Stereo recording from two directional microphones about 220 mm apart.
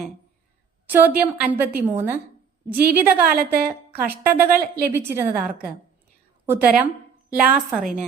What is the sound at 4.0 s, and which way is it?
Speech, 40° right (ahead or behind).